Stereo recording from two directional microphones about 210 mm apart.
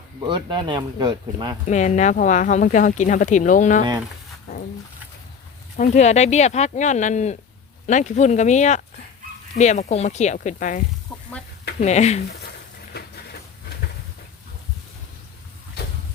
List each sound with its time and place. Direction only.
0.2 s speech: 20° right (ahead or behind)
1.6 s speech: 35° left (ahead or behind)
5.7 s speech: 40° left (ahead or behind)
12.9 s a sound: 50° left (ahead or behind)